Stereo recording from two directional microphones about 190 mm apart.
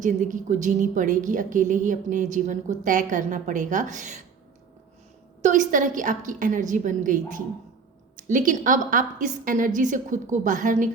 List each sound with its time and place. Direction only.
0.0 s a woman's voice: 40° right (ahead or behind)
5.4 s a woman's voice: 40° right (ahead or behind)